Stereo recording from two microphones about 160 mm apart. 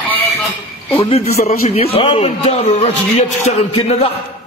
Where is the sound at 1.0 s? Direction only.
40° left (ahead or behind).